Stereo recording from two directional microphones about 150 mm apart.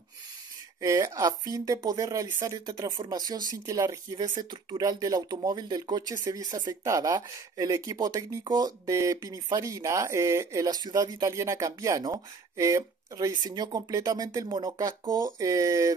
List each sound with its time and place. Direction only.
0.7 s speech: 20° right (ahead or behind)